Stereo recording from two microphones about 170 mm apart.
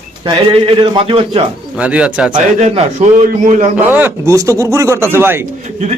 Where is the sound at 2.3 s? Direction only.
35° right (ahead or behind).